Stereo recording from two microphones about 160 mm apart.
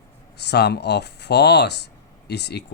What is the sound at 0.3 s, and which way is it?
Speech, 90° left.